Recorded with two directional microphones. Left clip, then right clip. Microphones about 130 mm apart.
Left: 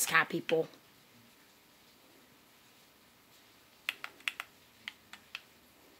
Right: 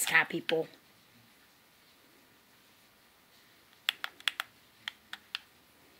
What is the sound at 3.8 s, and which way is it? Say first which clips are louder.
Typing: right 5 dB; 45° right (ahead or behind).